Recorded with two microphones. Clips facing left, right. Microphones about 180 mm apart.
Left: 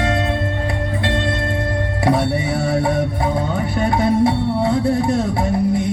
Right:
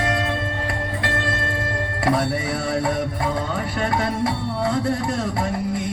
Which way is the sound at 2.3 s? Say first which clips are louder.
Left 4 dB; 25° left (ahead or behind).